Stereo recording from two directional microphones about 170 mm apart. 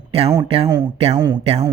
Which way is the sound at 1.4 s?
40° right (ahead or behind).